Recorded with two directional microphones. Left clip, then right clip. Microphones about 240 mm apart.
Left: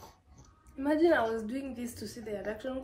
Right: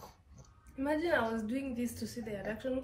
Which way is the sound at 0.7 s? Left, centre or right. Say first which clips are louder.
Left 5 dB; centre.